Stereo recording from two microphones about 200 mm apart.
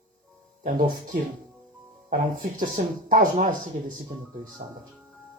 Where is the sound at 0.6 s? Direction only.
40° right (ahead or behind).